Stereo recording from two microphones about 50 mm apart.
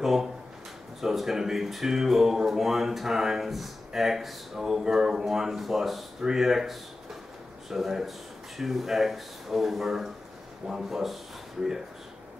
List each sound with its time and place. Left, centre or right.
0.0 s speech: centre